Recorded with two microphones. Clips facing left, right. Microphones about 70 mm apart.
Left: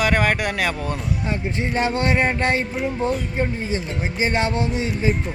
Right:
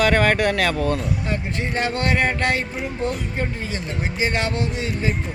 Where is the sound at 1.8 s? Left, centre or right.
Centre.